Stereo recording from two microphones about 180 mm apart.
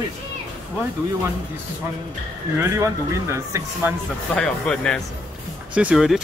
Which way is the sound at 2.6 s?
15° right (ahead or behind).